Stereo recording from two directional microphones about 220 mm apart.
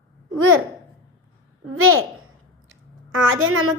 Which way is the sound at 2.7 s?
65° right (ahead or behind).